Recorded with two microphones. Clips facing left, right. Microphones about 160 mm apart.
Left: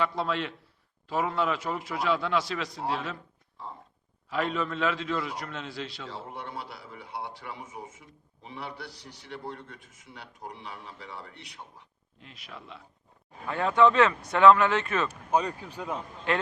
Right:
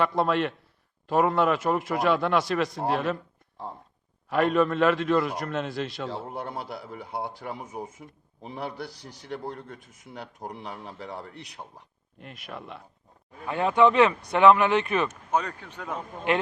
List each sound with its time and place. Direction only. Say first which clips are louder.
0.0 s a man's voice: right 5 dB; 55° right (ahead or behind)
4.3 s a man's voice: right 7 dB; 55° right (ahead or behind)
12.2 s speech: right 6 dB; 55° right (ahead or behind)
13.5 s speech: right 2 dB; 15° right (ahead or behind)
15.3 s speech: left 1 dB; 10° left (ahead or behind)
16.3 s a man's voice: right 3 dB; 20° right (ahead or behind)